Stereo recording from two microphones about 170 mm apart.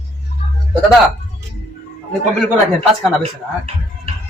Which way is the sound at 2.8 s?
35° right (ahead or behind).